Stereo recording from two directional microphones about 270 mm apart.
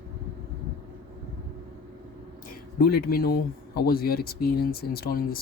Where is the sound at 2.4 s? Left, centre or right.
Left.